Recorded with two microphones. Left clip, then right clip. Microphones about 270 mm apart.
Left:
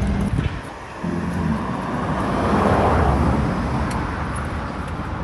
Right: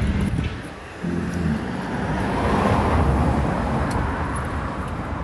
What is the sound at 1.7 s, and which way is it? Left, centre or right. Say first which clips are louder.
Vehicle: left 2 dB; left.